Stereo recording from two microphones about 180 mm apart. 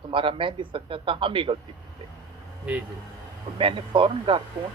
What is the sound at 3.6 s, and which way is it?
Speech, 30° right (ahead or behind).